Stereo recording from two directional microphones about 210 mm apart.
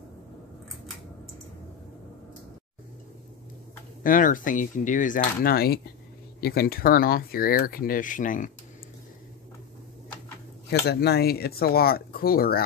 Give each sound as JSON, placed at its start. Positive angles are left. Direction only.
{"t": 4.0, "sound": "speech", "side_deg": 40}
{"t": 10.7, "sound": "speech", "side_deg": 50}